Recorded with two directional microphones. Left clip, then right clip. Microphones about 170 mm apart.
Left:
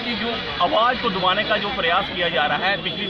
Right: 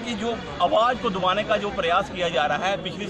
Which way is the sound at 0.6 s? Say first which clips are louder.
Left 1 dB; 30° right (ahead or behind).